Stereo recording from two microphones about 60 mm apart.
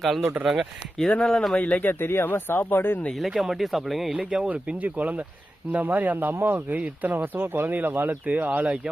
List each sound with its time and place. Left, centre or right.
0.4 s speech: centre
1.1 s speech: centre; by 3.1 s left
3.2 s speech: centre
4.1 s speech: centre